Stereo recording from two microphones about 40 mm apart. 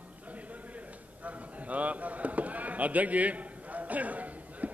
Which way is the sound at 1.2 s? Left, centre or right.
Right.